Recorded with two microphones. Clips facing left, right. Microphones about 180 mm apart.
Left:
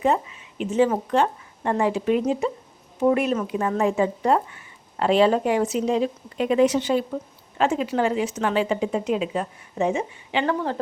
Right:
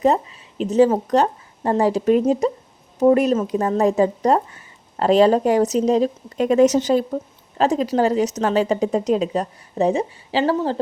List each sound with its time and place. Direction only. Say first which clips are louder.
0.0 s a woman's voice: right 4 dB; 35° right (ahead or behind)